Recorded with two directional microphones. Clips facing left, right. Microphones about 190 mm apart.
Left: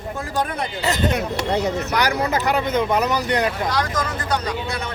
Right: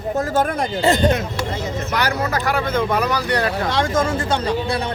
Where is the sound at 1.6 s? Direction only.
70° left (ahead or behind).